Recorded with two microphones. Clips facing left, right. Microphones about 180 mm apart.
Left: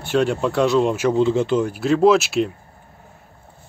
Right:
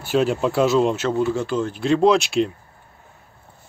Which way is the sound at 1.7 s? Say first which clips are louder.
Left 1 dB; 5° left (ahead or behind).